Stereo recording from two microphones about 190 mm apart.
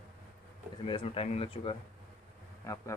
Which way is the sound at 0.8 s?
25° left (ahead or behind).